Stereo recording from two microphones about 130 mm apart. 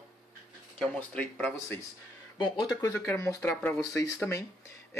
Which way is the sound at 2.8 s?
25° left (ahead or behind).